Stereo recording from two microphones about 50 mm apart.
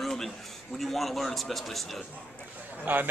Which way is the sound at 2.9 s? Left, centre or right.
Right.